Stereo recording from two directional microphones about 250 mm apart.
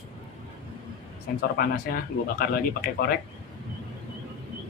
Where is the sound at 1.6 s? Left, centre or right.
Left.